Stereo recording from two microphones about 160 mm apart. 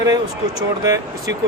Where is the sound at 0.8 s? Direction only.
20° right (ahead or behind).